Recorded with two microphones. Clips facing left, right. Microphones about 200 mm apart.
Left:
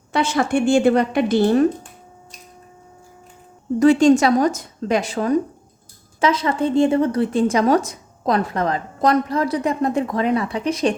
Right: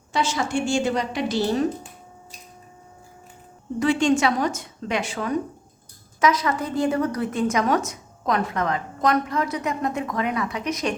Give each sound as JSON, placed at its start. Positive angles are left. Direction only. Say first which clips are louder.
{"t": 0.1, "sound": "a woman's voice", "louder": "left 5 dB", "side_deg": 60}
{"t": 3.8, "sound": "a woman's voice", "louder": "left 7 dB", "side_deg": 40}